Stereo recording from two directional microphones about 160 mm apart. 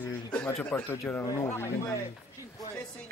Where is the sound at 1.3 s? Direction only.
20° left (ahead or behind).